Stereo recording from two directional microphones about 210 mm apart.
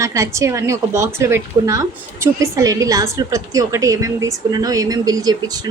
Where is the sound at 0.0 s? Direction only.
15° right (ahead or behind).